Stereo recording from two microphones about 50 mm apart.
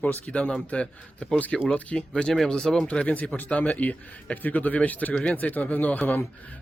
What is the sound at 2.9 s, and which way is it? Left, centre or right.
A man's voice, left.